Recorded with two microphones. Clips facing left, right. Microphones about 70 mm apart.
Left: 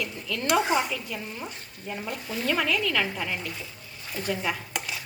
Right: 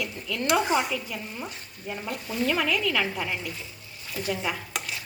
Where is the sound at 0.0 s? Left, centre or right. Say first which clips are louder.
Right 1 dB; centre.